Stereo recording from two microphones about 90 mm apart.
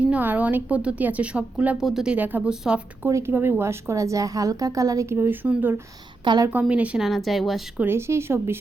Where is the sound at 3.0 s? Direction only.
30° right (ahead or behind).